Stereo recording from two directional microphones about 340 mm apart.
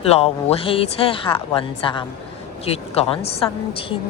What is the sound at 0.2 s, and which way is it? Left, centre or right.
A woman's voice, centre.